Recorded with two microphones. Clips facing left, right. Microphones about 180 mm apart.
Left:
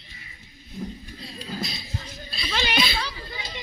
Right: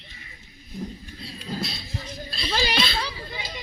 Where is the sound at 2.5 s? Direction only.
35° right (ahead or behind).